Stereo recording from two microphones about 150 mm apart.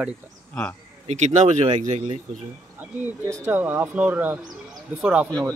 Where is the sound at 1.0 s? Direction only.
50° right (ahead or behind).